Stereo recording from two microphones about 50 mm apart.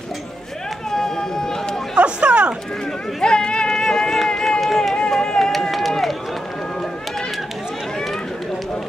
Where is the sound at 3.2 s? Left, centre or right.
Centre.